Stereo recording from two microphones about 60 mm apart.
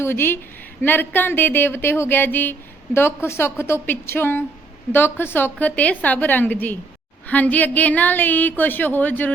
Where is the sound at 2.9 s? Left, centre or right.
Left.